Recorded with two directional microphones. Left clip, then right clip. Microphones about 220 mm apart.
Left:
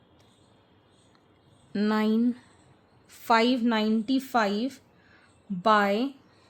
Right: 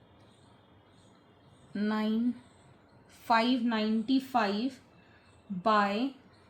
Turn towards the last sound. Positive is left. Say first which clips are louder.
# left 5 dB
turn(degrees=50)  # may be behind; listen again after turning